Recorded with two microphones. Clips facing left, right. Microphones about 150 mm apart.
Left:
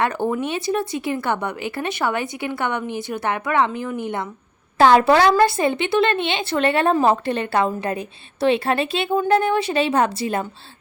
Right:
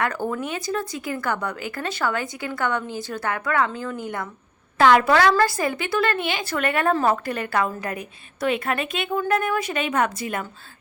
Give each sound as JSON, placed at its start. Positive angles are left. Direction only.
{"t": 0.0, "sound": "speech", "side_deg": 25}